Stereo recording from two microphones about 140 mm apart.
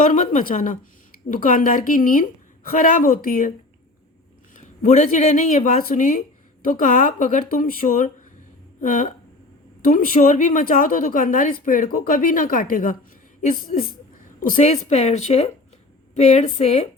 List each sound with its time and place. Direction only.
0.1 s a woman's voice: 60° left (ahead or behind); by 2.2 s 85° left
2.6 s speech: 70° left (ahead or behind)
4.5 s a woman's voice: 60° left (ahead or behind)